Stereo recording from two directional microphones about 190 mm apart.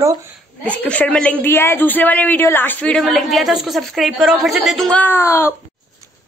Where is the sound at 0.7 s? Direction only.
5° left (ahead or behind).